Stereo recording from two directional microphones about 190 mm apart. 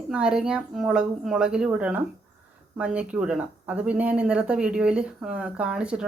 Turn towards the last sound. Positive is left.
turn(degrees=-5)  # may be behind; listen again after turning